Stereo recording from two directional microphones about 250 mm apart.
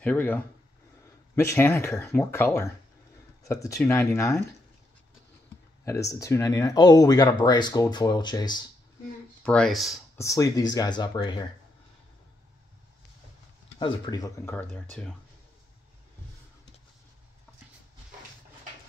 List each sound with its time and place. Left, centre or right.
0.0 s speech: centre
5.9 s speech: centre
9.4 s speech: centre
10.1 s speech: centre
13.7 s speech: centre